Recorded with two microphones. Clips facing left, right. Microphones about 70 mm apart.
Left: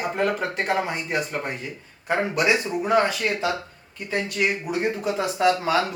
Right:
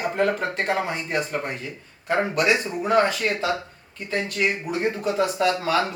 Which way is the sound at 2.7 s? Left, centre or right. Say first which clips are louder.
Even; centre.